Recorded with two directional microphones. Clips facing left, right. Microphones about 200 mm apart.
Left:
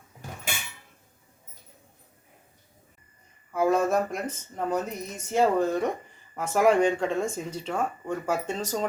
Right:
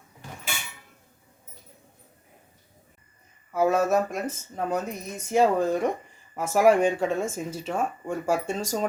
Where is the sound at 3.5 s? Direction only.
5° right (ahead or behind).